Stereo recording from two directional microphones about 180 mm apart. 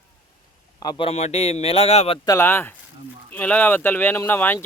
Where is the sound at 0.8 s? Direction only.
25° left (ahead or behind).